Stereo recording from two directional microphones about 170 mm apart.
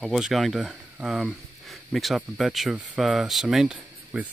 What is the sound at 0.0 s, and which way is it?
Speech, centre (ahead or behind).